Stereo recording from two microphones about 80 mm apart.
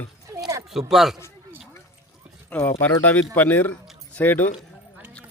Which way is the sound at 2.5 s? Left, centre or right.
Left.